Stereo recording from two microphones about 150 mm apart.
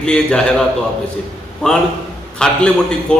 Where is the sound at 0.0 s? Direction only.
5° left (ahead or behind).